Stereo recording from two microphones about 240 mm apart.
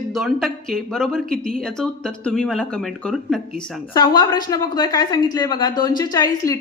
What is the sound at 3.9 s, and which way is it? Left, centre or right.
A woman's voice, centre.